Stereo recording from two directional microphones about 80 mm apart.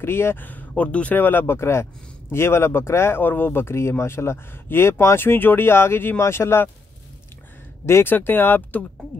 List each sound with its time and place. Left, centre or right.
0.0 s speech: left
7.8 s speech: left